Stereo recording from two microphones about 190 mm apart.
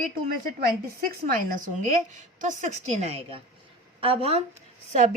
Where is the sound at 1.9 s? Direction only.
40° right (ahead or behind).